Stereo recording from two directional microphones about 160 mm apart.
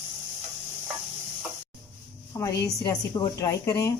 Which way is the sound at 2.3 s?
20° left (ahead or behind).